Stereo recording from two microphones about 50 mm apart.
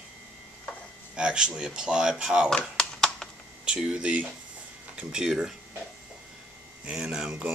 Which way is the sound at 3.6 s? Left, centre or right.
Centre.